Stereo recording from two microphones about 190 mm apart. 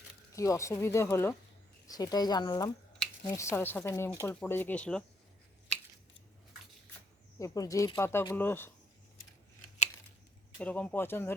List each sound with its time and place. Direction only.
0.3 s speech: 15° left (ahead or behind)
7.3 s speech: 20° left (ahead or behind)
10.6 s speech: 5° left (ahead or behind)